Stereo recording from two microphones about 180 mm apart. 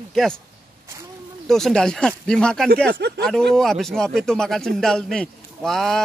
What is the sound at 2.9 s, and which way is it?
Speech, 70° right (ahead or behind).